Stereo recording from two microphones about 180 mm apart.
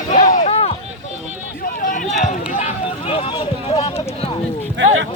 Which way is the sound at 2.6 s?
35° left (ahead or behind).